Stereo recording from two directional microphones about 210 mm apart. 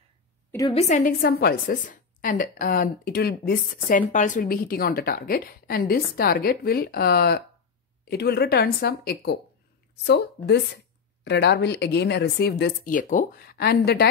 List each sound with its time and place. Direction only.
0.5 s a woman's voice: 15° left (ahead or behind)
0.7 s a woman's voice: 35° left (ahead or behind)